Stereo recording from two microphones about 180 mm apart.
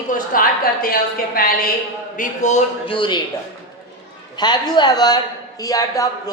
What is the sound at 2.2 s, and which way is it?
Speech, 40° left (ahead or behind).